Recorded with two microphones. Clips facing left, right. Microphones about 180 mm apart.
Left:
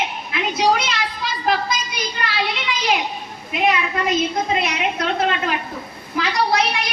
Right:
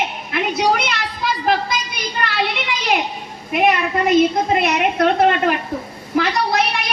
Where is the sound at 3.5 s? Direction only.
55° right (ahead or behind).